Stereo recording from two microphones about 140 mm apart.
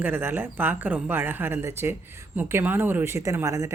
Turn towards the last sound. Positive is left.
turn(degrees=-20)  # may be behind; listen again after turning